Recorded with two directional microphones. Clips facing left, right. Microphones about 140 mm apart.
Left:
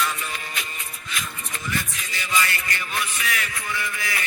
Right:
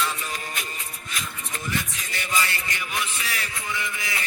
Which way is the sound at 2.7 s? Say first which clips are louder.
Left 1 dB; 15° right (ahead or behind).